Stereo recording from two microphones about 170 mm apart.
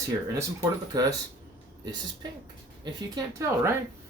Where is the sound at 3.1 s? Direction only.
15° right (ahead or behind).